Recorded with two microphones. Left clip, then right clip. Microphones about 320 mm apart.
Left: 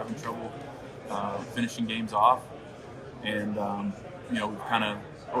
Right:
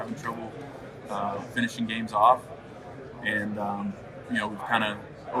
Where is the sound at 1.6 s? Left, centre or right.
Left.